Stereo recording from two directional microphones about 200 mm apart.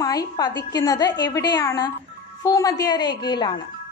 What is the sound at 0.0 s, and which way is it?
A woman's voice, 20° left (ahead or behind).